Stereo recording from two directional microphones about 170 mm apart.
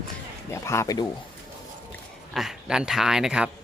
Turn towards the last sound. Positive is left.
turn(degrees=-5)  # may be behind; listen again after turning